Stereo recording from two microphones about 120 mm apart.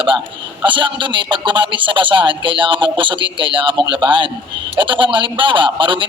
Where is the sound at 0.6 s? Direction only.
40° right (ahead or behind).